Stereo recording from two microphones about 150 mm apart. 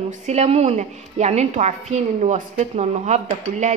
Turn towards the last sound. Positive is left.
turn(degrees=-50)  # may be behind; listen again after turning